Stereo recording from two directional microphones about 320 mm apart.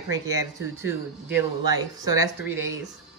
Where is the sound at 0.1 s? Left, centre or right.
Centre.